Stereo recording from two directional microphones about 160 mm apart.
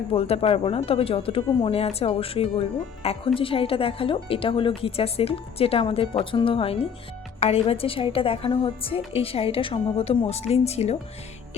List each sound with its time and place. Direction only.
0.1 s a woman's voice: 40° left (ahead or behind)